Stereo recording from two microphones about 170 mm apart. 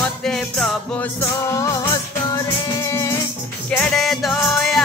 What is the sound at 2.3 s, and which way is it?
Music, 15° left (ahead or behind).